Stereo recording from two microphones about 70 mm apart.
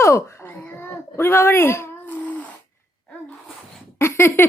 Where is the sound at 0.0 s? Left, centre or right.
Left.